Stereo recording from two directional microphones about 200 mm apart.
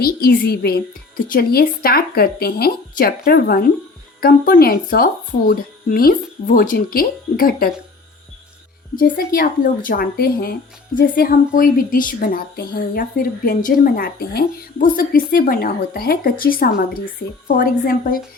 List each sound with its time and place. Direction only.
0.0 s speech: 50° left (ahead or behind)
9.0 s speech: 45° left (ahead or behind)